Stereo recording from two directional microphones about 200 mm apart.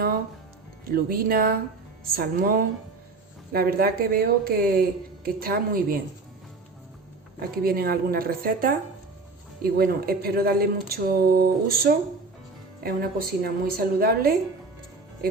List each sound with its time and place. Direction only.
0.9 s speech: 45° right (ahead or behind)
7.3 s speech: 50° right (ahead or behind)